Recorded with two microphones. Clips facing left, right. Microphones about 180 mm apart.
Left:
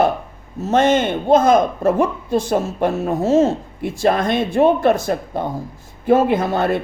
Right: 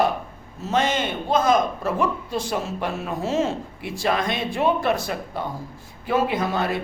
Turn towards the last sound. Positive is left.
turn(degrees=55)  # may be behind; listen again after turning